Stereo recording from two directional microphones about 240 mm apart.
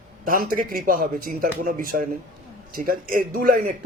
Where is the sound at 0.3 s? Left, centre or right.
Right.